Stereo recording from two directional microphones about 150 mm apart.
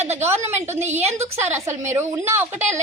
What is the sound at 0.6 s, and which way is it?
Speech, 15° right (ahead or behind).